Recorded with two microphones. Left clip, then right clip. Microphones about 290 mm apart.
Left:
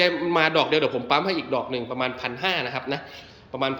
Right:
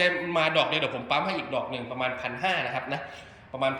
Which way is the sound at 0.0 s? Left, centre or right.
Centre.